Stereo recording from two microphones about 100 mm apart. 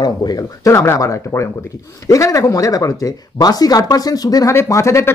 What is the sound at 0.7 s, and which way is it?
A man's voice, 30° left (ahead or behind).